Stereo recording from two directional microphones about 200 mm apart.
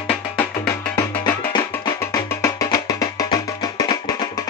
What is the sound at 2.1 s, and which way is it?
Music, 15° left (ahead or behind).